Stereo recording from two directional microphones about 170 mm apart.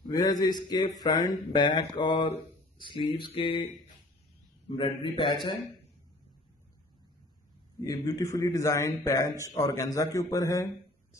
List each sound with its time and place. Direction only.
0.2 s a man's voice: 25° left (ahead or behind)
7.8 s a man's voice: 20° left (ahead or behind)